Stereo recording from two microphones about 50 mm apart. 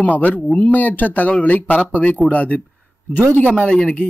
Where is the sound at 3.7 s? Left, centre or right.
Centre.